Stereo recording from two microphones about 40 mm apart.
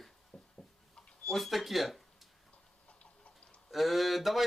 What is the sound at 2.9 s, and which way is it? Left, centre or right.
Tick-tock, left.